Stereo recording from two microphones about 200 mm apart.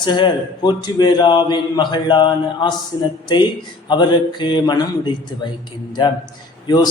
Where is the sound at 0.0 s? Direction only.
25° left (ahead or behind).